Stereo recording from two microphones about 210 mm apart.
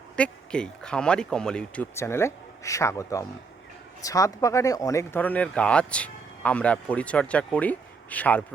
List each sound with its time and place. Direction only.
0.2 s speech: 5° left (ahead or behind)